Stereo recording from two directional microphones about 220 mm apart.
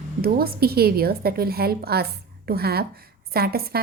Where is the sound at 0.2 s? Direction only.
45° right (ahead or behind).